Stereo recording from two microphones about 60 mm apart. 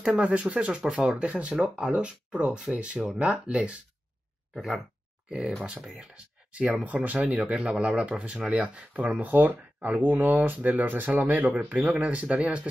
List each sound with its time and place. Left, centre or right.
0.1 s speech: centre
4.6 s speech: centre
5.3 s speech: centre